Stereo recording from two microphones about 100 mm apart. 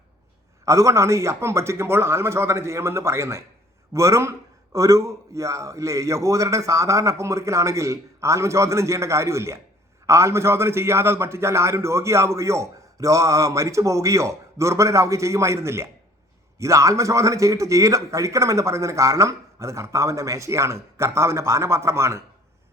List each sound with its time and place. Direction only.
0.6 s a man's voice: 30° right (ahead or behind)